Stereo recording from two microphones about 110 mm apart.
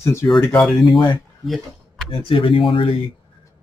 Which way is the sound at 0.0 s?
25° left (ahead or behind).